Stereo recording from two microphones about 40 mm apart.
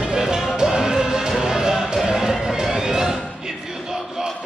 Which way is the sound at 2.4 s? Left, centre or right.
Centre.